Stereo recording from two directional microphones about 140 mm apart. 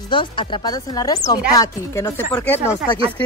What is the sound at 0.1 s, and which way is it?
Chopping, 35° left (ahead or behind).